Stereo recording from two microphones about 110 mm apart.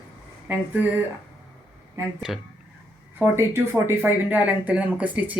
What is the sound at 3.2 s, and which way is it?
Speech, 25° right (ahead or behind).